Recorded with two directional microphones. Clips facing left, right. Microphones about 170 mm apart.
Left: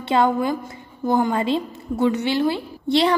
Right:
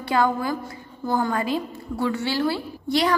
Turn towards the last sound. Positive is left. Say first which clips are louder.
# left 3 dB
turn(degrees=25)  # may be behind; listen again after turning